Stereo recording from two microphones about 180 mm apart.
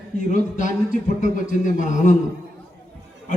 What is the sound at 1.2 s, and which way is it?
Speech, 45° left (ahead or behind).